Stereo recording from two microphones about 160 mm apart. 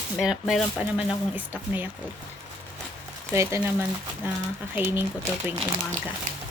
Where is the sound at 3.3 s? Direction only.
15° right (ahead or behind).